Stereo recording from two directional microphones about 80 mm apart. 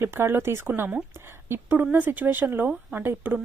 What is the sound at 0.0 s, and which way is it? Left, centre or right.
A woman's voice, right.